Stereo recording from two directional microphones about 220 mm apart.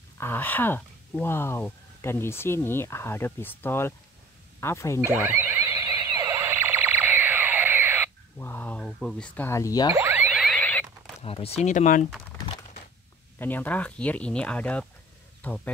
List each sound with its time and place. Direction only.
0.2 s speech: 10° left (ahead or behind)
5.0 s a sound: 10° right (ahead or behind)
8.4 s speech: 10° left (ahead or behind)
9.9 s boing: 10° right (ahead or behind)
11.1 s speech: 25° left (ahead or behind)
13.4 s speech: 10° left (ahead or behind)